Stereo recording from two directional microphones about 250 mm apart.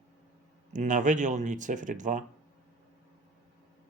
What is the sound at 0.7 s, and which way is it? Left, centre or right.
Speech, right.